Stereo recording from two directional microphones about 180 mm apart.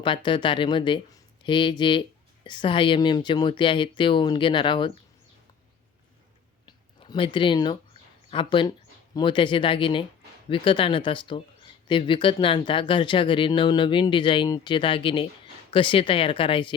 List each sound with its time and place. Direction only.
0.0 s speech: 25° left (ahead or behind)
6.7 s a sound: 25° left (ahead or behind)
8.3 s speech: 30° left (ahead or behind)